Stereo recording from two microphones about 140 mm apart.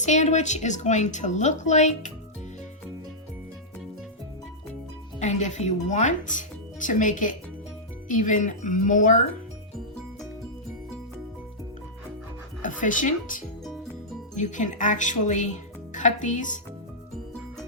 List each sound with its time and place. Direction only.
0.0 s speech: 60° left (ahead or behind)
5.2 s speech: 60° left (ahead or behind)
12.6 s speech: 65° left (ahead or behind)